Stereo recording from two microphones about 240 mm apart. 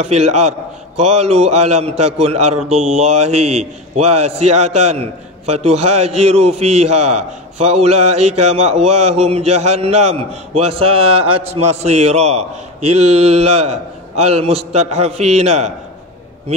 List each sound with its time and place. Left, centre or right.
0.0 s a man's voice: right